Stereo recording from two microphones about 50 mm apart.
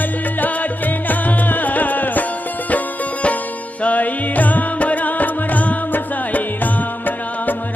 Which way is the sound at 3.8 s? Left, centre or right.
Left.